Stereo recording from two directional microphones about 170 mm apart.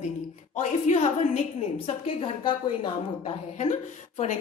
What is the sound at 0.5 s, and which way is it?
Speech, 45° left (ahead or behind).